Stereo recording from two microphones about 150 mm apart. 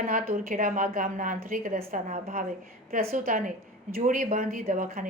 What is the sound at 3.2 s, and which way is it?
A woman's voice, 70° right (ahead or behind).